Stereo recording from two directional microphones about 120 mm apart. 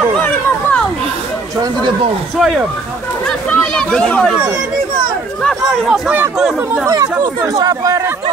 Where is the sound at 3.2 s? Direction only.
5° left (ahead or behind).